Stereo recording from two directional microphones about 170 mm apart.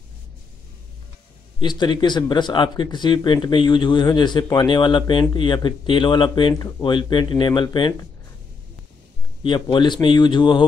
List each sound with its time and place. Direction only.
1.6 s speech: 25° left (ahead or behind)
9.4 s speech: 30° left (ahead or behind)